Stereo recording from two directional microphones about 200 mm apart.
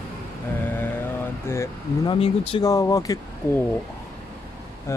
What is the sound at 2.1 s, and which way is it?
Speech, 30° left (ahead or behind).